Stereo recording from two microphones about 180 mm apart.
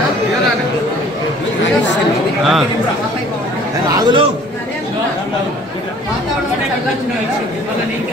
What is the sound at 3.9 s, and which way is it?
Speech, 25° right (ahead or behind).